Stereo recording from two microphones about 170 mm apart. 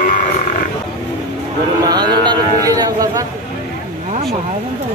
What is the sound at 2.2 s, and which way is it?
Speech, 20° right (ahead or behind).